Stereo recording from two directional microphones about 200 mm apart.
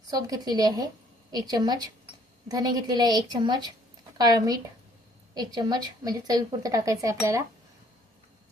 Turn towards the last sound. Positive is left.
turn(degrees=-15)  # may be behind; listen again after turning